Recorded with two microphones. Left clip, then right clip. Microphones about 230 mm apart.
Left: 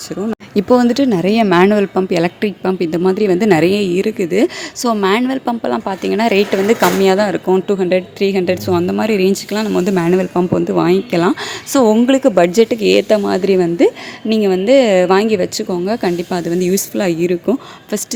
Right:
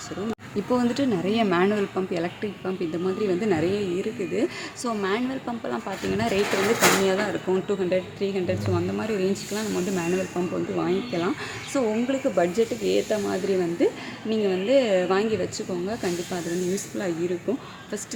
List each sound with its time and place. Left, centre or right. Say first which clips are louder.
0.5 s speech: left 13 dB; left